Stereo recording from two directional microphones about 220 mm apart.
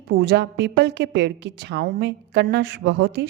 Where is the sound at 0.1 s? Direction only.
50° right (ahead or behind).